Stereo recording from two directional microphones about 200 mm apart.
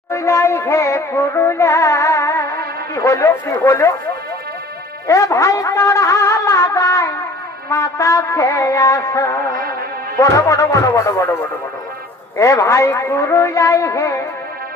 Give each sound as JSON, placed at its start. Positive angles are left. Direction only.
{"t": 0.1, "sound": "music", "side_deg": 15}
{"t": 5.0, "sound": "music", "side_deg": 15}
{"t": 12.4, "sound": "music", "side_deg": 15}